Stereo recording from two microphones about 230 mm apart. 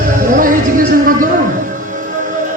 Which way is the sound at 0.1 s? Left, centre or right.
Right.